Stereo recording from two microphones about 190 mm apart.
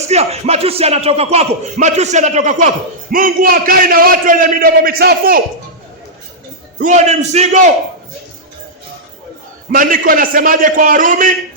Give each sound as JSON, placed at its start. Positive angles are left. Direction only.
{"t": 0.1, "sound": "a man's voice", "side_deg": -35}
{"t": 6.8, "sound": "a man's voice", "side_deg": -40}
{"t": 9.7, "sound": "a man's voice", "side_deg": -45}